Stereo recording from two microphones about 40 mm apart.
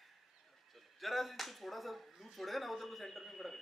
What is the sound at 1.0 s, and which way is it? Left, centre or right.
A man's voice, centre.